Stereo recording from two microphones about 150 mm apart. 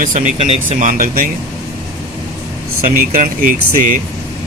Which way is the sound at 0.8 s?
65° right (ahead or behind).